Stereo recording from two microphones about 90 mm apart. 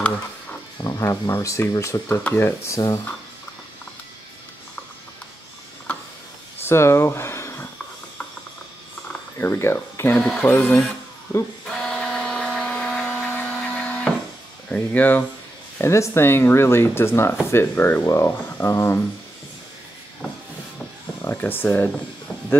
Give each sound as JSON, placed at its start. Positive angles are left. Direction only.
{"t": 0.8, "sound": "speech", "side_deg": 40}
{"t": 5.9, "sound": "a sound", "side_deg": 15}
{"t": 6.6, "sound": "a sound", "side_deg": 30}
{"t": 9.4, "sound": "speech", "side_deg": 30}
{"t": 10.1, "sound": "speech", "side_deg": 10}
{"t": 10.5, "sound": "speech", "side_deg": 20}
{"t": 11.6, "sound": "printer", "side_deg": 5}
{"t": 14.7, "sound": "speech", "side_deg": 15}
{"t": 15.8, "sound": "speech", "side_deg": 35}
{"t": 21.2, "sound": "speech", "side_deg": 25}